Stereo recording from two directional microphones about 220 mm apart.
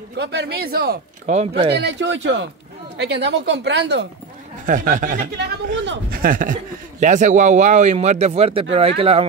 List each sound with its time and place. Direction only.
0.2 s speech: 50° right (ahead or behind)
1.3 s speech: 30° right (ahead or behind)
1.7 s speech: 50° right (ahead or behind)
4.6 s speech: 35° right (ahead or behind)